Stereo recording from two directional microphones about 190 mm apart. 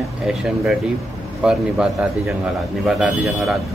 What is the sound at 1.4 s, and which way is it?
Speech, 5° right (ahead or behind).